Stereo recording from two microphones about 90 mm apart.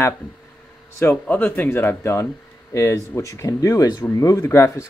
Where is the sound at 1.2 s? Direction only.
15° left (ahead or behind); by 4.4 s 40° left (ahead or behind).